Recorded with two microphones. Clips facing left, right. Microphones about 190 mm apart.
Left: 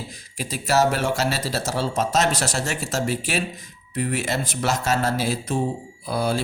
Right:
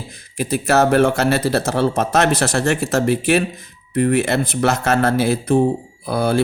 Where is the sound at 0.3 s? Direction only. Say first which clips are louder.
Right 5 dB; 55° right (ahead or behind).